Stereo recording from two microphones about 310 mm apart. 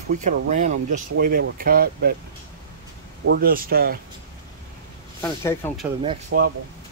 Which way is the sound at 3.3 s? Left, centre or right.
Right.